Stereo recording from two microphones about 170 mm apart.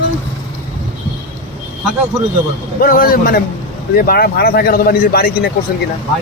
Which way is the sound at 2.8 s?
55° left (ahead or behind).